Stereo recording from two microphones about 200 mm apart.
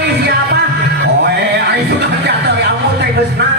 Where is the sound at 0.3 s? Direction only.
55° right (ahead or behind).